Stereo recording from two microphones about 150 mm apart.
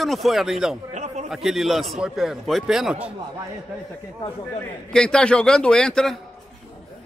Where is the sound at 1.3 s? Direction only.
Centre (ahead or behind).